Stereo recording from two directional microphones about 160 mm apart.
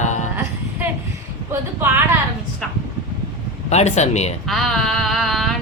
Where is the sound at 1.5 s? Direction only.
15° right (ahead or behind).